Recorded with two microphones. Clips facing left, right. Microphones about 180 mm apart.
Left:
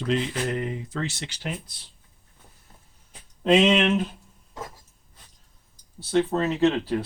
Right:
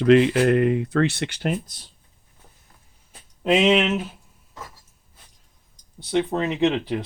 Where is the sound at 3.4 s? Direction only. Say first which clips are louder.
Right 1 dB; 10° right (ahead or behind).